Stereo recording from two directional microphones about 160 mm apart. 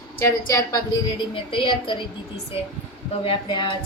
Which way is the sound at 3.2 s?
30° left (ahead or behind).